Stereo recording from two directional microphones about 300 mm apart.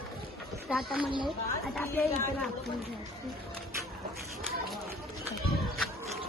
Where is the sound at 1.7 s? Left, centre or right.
Centre.